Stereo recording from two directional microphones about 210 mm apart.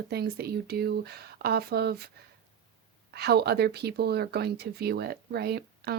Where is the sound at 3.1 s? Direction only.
50° right (ahead or behind).